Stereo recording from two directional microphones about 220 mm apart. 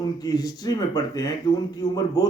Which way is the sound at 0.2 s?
15° left (ahead or behind).